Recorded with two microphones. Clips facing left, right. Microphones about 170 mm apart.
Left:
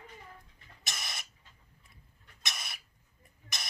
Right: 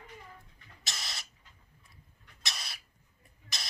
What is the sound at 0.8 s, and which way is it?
Owl, 20° left (ahead or behind).